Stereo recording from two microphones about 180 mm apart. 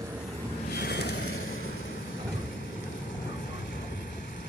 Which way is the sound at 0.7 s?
65° left (ahead or behind).